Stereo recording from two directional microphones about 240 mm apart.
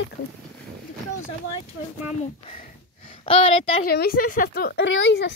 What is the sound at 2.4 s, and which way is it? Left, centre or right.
Speech, left.